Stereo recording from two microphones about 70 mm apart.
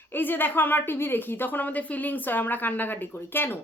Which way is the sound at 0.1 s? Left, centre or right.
Left.